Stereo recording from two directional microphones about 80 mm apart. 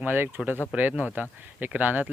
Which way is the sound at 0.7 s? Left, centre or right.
Centre.